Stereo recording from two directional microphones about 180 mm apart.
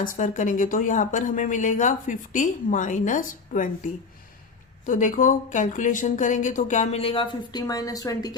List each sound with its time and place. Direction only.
0.0 s speech: 45° left (ahead or behind)
4.9 s speech: 45° left (ahead or behind); by 8.4 s 20° left (ahead or behind)